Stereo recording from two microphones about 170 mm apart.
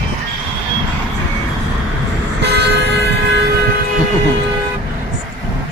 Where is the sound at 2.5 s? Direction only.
90° right.